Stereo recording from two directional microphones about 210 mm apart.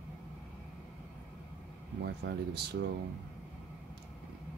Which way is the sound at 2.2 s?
55° right (ahead or behind).